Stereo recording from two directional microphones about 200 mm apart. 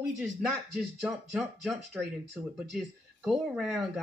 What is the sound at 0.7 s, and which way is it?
Speech, centre (ahead or behind).